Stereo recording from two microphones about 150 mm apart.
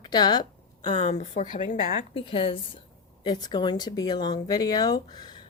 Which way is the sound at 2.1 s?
35° left (ahead or behind).